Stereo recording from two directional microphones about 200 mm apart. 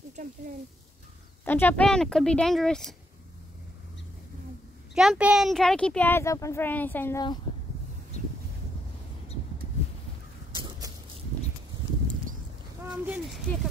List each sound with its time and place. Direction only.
1.4 s speech: 10° left (ahead or behind)
4.9 s speech: 5° right (ahead or behind)
10.5 s a sound: 20° right (ahead or behind)
12.8 s speech: 5° right (ahead or behind)